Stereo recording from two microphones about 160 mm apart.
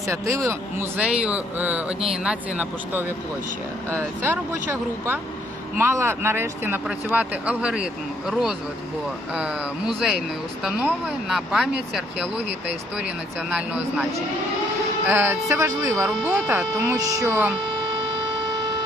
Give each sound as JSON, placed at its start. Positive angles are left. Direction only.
{"t": 0.1, "sound": "speech", "side_deg": -20}
{"t": 15.0, "sound": "speech", "side_deg": -15}